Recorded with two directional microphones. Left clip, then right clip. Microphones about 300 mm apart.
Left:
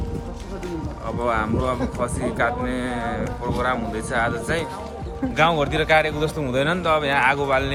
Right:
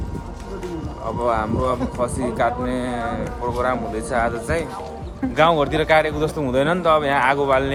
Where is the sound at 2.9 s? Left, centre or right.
Right.